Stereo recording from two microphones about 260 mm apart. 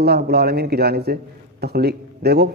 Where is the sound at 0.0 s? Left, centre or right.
Right.